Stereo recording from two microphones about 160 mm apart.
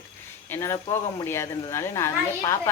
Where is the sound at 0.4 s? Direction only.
15° left (ahead or behind).